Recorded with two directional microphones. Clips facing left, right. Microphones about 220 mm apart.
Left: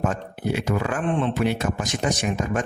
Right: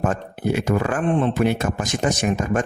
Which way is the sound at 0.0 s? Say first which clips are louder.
Right 3 dB; 50° right (ahead or behind).